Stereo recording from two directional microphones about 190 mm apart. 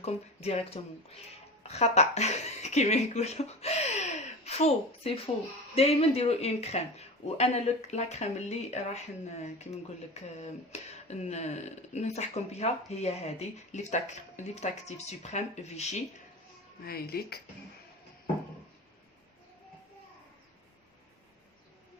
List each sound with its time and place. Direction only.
0.0 s speech: 35° left (ahead or behind)
16.8 s speech: 55° left (ahead or behind)